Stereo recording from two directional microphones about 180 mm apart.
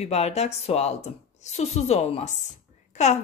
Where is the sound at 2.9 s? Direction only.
40° left (ahead or behind).